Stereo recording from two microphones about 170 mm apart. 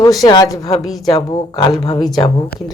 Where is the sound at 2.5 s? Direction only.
60° left (ahead or behind).